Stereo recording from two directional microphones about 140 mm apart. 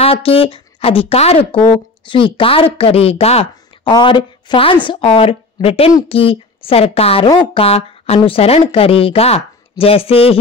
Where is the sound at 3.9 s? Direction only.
30° left (ahead or behind).